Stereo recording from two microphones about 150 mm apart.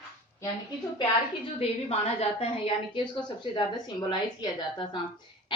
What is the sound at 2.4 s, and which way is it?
A woman's voice, 35° left (ahead or behind).